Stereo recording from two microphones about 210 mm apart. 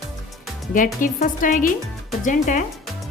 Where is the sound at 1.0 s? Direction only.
40° left (ahead or behind).